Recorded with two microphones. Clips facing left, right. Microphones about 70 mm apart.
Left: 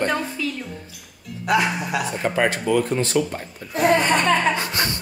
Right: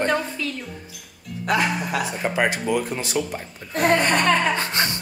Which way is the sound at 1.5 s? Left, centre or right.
Right.